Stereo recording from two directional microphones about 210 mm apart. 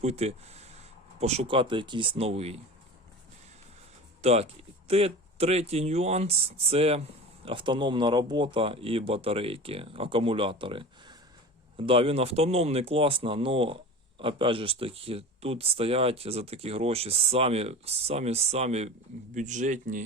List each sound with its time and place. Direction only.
0.0 s speech: 30° right (ahead or behind)
4.2 s speech: 30° right (ahead or behind)